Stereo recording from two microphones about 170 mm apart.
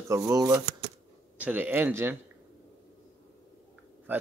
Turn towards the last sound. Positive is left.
turn(degrees=-10)  # may be behind; listen again after turning